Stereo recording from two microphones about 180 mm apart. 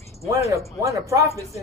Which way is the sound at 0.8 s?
15° right (ahead or behind).